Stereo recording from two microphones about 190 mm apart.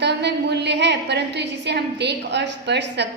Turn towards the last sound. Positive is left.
turn(degrees=-65)  # may be behind; listen again after turning